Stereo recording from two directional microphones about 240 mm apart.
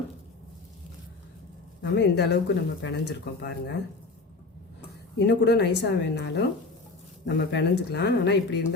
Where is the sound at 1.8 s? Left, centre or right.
Left.